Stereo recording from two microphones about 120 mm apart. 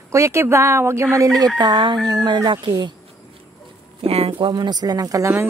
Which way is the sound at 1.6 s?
40° right (ahead or behind).